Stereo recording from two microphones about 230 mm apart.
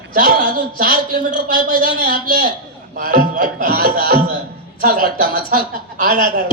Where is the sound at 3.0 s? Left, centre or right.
Right.